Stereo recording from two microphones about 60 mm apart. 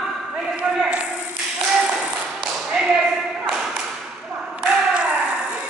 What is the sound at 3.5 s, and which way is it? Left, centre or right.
Tap, centre.